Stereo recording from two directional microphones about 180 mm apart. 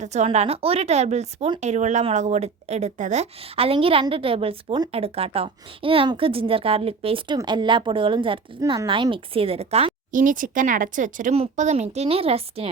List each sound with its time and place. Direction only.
0.0 s speech: 40° right (ahead or behind)